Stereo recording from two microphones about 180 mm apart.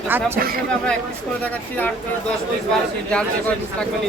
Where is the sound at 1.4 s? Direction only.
10° left (ahead or behind).